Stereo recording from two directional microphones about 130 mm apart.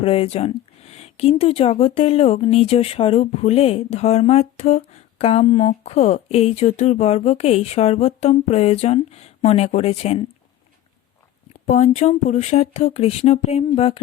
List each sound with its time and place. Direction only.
0.0 s speech: 45° left (ahead or behind)
11.6 s speech: 70° left (ahead or behind); by 14.0 s 50° left (ahead or behind)